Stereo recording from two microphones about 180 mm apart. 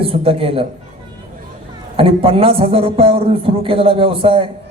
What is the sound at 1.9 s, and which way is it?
A man's voice, 30° right (ahead or behind).